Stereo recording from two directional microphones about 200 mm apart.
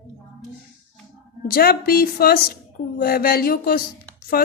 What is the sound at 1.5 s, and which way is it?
A woman's voice, 50° left (ahead or behind).